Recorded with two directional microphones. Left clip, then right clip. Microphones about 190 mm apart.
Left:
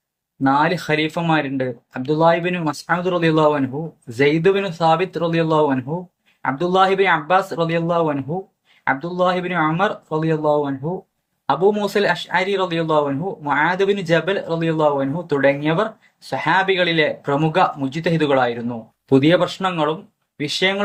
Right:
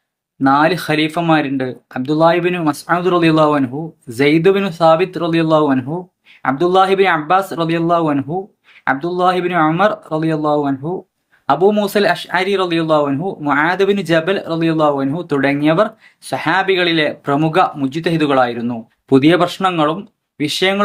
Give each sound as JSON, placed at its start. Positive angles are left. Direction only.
{"t": 0.4, "sound": "speech", "side_deg": -20}